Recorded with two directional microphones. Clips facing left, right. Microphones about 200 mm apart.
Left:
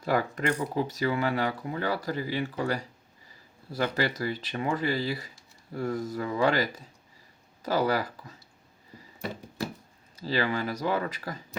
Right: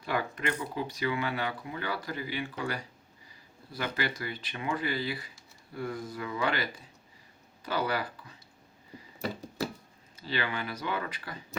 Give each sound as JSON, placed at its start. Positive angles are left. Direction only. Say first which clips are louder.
{"t": 0.0, "sound": "speech", "louder": "left 5 dB", "side_deg": 40}
{"t": 10.2, "sound": "speech", "louder": "left 6 dB", "side_deg": 40}